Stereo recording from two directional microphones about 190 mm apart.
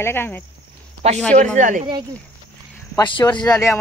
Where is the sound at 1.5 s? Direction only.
45° right (ahead or behind).